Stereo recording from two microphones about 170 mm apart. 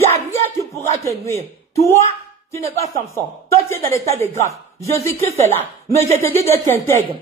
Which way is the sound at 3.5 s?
15° left (ahead or behind).